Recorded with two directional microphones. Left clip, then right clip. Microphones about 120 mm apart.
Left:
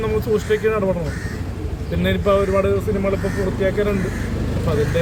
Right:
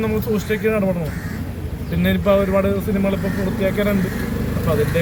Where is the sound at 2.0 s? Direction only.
15° left (ahead or behind).